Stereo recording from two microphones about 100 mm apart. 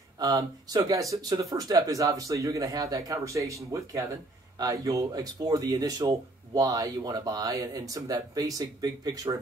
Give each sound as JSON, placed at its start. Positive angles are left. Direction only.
{"t": 0.2, "sound": "speech", "side_deg": -40}